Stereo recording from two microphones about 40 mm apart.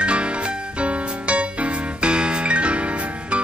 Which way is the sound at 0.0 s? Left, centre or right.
Right.